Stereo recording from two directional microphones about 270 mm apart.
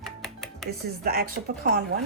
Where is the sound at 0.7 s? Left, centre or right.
Right.